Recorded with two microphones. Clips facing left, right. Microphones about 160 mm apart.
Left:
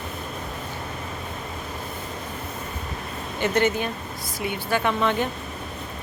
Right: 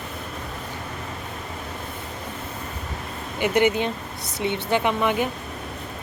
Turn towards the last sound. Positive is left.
turn(degrees=-15)  # may be behind; listen again after turning